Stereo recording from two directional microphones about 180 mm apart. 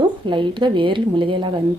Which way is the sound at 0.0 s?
25° right (ahead or behind).